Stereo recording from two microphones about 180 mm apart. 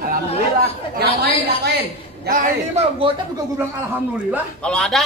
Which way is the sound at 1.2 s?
65° right (ahead or behind).